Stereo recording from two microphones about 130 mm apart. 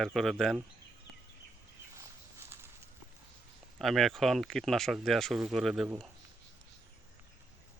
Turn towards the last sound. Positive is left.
turn(degrees=0)  # may be behind; listen again after turning